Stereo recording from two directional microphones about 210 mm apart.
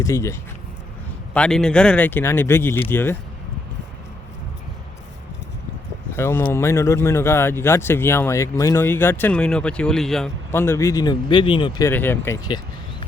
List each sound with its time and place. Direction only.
0.0 s speech: 15° left (ahead or behind)
1.3 s speech: 5° left (ahead or behind)
6.1 s speech: 10° left (ahead or behind)
11.9 s speech: 10° left (ahead or behind)